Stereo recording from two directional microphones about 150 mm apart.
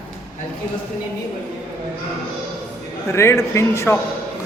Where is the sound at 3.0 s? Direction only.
15° left (ahead or behind).